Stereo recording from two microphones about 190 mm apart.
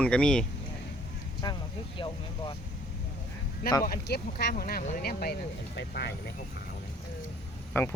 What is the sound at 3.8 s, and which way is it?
Speech, 50° left (ahead or behind).